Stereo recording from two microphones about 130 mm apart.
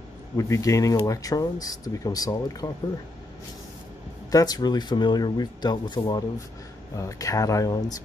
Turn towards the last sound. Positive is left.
turn(degrees=30)  # may be behind; listen again after turning